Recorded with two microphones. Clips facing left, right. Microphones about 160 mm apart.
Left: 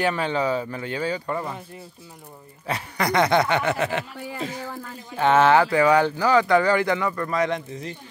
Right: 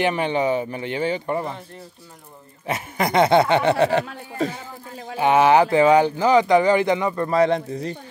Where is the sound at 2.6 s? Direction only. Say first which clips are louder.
Right 2 dB; 20° right (ahead or behind).